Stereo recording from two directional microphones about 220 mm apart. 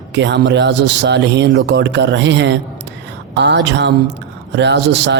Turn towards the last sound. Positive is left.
turn(degrees=-50)  # may be behind; listen again after turning